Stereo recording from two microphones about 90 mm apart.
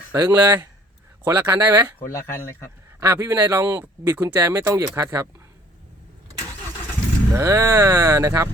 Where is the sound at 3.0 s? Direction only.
30° right (ahead or behind).